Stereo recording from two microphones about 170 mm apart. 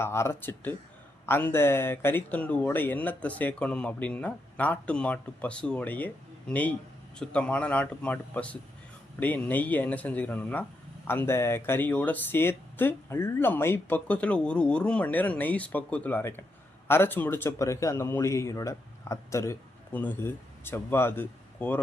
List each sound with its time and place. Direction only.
0.0 s speech: 15° left (ahead or behind)